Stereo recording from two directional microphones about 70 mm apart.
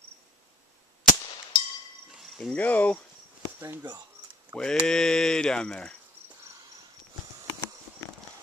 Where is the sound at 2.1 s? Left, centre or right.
Centre.